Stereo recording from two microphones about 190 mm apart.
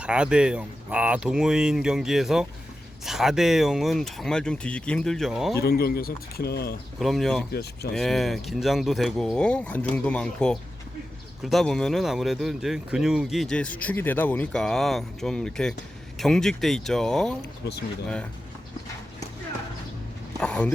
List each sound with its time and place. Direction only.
0.0 s speech: 5° right (ahead or behind)
5.5 s speech: 55° left (ahead or behind)
7.0 s speech: centre (ahead or behind)
7.5 s speech: 60° left (ahead or behind)
7.9 s speech: centre (ahead or behind)
20.4 s a sound: 5° left (ahead or behind)